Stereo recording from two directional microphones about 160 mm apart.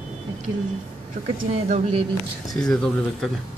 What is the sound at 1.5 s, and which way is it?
Speech, 40° right (ahead or behind).